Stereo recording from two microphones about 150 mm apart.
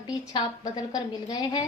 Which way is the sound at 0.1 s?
25° left (ahead or behind).